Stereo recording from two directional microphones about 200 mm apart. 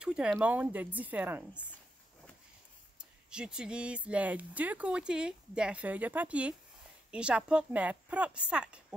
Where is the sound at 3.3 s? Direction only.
5° right (ahead or behind).